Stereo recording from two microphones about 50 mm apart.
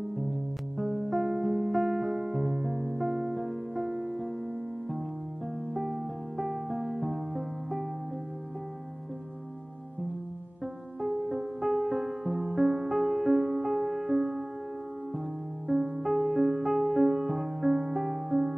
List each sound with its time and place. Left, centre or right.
1.3 s music: centre
5.9 s music: centre
11.2 s music: centre
15.7 s music: centre